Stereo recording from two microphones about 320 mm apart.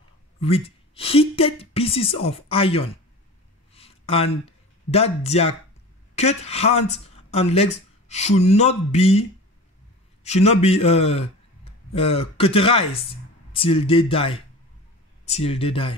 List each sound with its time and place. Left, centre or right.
0.4 s a woman's voice: centre
3.7 s a sound: centre
6.1 s speech: centre
10.2 s a woman's voice: centre